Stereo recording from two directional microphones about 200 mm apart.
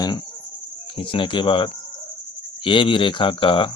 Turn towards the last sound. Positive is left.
turn(degrees=25)  # may be behind; listen again after turning